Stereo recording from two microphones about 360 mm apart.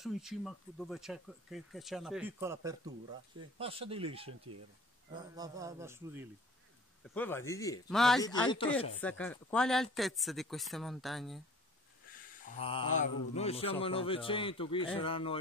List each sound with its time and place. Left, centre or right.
0.0 s a man's voice: centre
7.2 s speech: centre
12.4 s speech: centre